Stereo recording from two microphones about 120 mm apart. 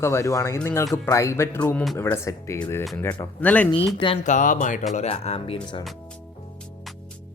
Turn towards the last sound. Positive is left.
turn(degrees=55)  # may be behind; listen again after turning